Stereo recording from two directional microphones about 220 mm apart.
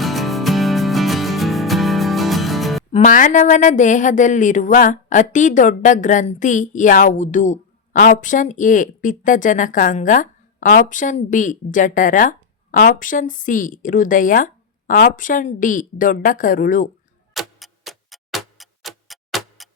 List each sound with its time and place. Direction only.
0.0 s music: centre (ahead or behind)
2.9 s speech: 35° left (ahead or behind)
17.3 s tick-tock: centre (ahead or behind)